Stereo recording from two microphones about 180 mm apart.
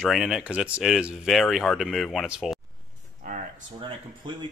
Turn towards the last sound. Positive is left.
turn(degrees=-25)  # may be behind; listen again after turning